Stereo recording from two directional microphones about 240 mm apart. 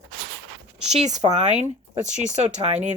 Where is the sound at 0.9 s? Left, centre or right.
Right.